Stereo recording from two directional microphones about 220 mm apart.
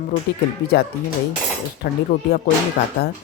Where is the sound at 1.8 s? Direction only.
45° left (ahead or behind).